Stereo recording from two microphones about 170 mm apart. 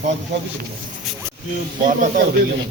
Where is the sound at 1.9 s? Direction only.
50° right (ahead or behind).